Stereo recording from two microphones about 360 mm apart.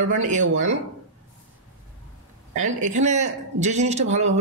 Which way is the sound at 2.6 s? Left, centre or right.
Right.